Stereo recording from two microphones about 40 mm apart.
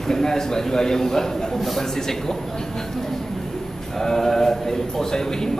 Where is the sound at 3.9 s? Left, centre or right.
Centre.